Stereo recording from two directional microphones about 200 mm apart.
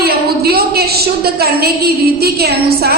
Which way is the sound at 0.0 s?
50° right (ahead or behind).